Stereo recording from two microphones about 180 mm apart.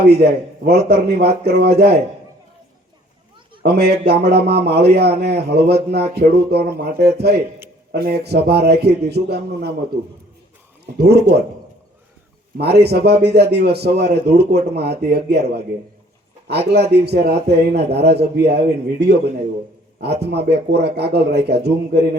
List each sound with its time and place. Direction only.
0.2 s a man's voice: 60° right (ahead or behind)
3.6 s a man's voice: 60° right (ahead or behind)
10.9 s a man's voice: 65° right (ahead or behind)
12.5 s a man's voice: 65° right (ahead or behind)